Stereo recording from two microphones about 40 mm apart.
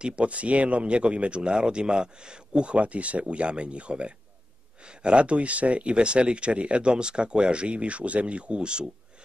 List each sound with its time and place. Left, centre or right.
0.0 s speech: right